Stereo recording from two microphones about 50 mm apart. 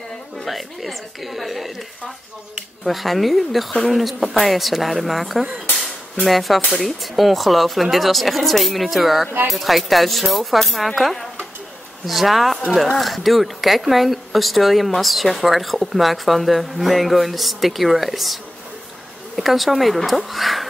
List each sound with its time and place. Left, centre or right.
0.4 s speech: centre
2.8 s speech: centre